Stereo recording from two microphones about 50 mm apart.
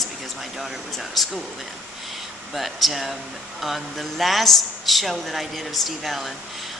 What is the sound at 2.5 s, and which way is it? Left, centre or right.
A woman's voice, centre.